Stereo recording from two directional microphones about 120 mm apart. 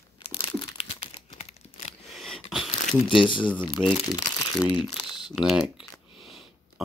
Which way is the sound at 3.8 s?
25° right (ahead or behind).